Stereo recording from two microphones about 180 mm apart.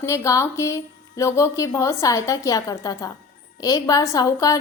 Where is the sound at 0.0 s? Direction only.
15° left (ahead or behind).